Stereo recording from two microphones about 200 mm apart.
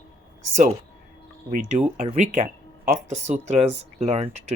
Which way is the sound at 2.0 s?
35° right (ahead or behind).